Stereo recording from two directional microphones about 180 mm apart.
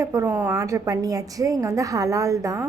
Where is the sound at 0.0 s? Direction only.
15° right (ahead or behind).